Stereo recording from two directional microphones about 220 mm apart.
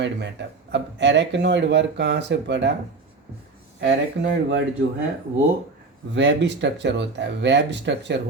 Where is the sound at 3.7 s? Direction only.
55° right (ahead or behind).